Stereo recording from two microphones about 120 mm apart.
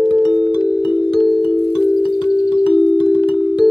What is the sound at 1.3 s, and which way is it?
Music, 45° left (ahead or behind).